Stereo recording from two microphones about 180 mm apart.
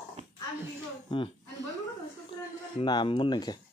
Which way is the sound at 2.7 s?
25° left (ahead or behind).